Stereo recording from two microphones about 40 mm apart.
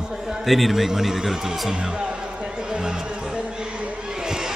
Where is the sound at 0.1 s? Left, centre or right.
Centre; by 4.1 s right.